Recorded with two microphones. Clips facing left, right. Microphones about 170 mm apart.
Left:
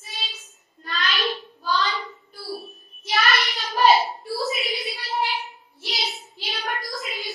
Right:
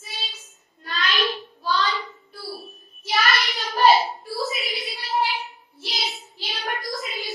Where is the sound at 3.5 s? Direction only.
Centre (ahead or behind).